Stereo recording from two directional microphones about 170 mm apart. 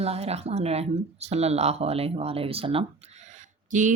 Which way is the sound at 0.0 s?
35° right (ahead or behind).